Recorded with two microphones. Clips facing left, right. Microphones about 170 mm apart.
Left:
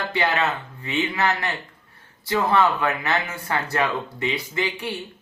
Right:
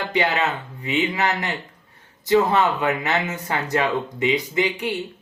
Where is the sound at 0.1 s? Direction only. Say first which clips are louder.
Right 2 dB; 15° right (ahead or behind).